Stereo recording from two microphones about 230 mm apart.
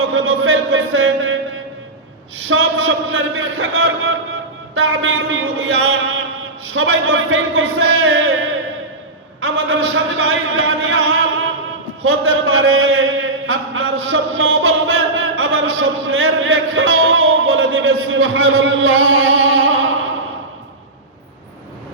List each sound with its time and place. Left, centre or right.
0.1 s a man's voice: right
2.5 s a man's voice: right
9.4 s a man's voice: right
13.5 s a sound: right